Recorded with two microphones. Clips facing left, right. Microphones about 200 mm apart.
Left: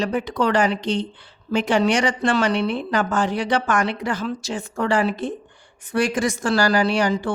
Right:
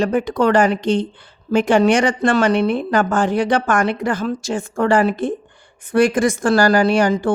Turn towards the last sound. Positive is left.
turn(degrees=-50)  # may be behind; listen again after turning